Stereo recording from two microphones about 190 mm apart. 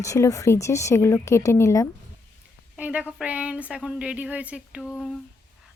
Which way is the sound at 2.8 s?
5° right (ahead or behind).